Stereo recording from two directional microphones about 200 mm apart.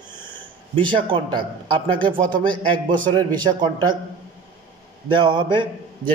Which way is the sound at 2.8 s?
40° right (ahead or behind).